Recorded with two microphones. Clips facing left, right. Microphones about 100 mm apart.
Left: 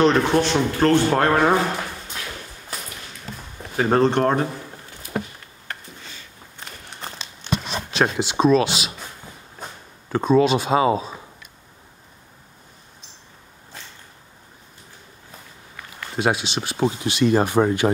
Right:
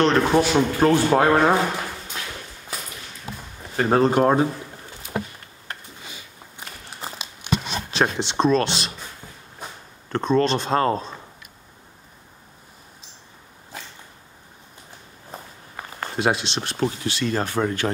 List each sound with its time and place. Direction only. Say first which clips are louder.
0.0 s speech: left 1 dB; 5° right (ahead or behind)
3.7 s speech: even; centre (ahead or behind)
6.0 s a sound: right 1 dB; 10° right (ahead or behind)
7.9 s speech: left 1 dB; centre (ahead or behind)
10.0 s speech: left 3 dB; 5° left (ahead or behind)
16.2 s speech: left 1 dB; centre (ahead or behind)
16.8 s speech: left 5 dB; 15° left (ahead or behind)